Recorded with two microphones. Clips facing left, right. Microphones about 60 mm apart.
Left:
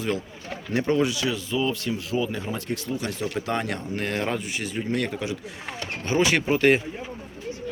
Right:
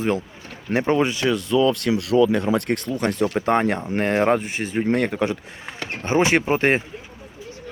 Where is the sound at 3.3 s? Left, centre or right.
Right.